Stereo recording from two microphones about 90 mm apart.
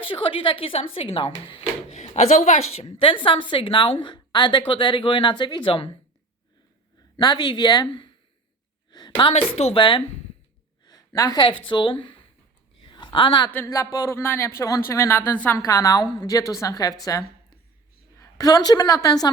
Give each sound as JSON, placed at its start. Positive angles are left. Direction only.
{"t": 0.0, "sound": "a woman's voice", "side_deg": 75}
{"t": 2.8, "sound": "a woman's voice", "side_deg": 85}
{"t": 7.2, "sound": "a woman's voice", "side_deg": 50}
{"t": 10.8, "sound": "a sound", "side_deg": 45}
{"t": 11.3, "sound": "speech", "side_deg": 65}
{"t": 12.8, "sound": "a sound", "side_deg": 60}
{"t": 13.7, "sound": "speech", "side_deg": 45}
{"t": 14.2, "sound": "speech", "side_deg": 30}
{"t": 15.5, "sound": "a woman's voice", "side_deg": 40}